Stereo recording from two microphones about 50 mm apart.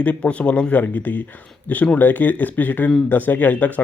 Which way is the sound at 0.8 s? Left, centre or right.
Left.